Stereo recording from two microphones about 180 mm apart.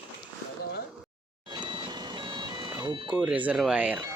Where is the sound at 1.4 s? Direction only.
25° right (ahead or behind).